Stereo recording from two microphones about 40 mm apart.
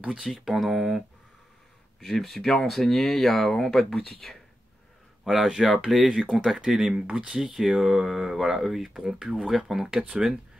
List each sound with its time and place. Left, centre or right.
0.3 s speech: centre
2.1 s speech: centre
5.2 s speech: centre
6.0 s speech: right
6.3 s speech: centre
9.8 s speech: centre